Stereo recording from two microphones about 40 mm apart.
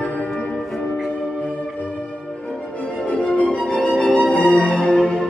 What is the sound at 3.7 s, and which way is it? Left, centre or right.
Music, left.